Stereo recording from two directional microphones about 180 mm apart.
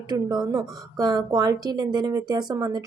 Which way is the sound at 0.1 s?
20° right (ahead or behind).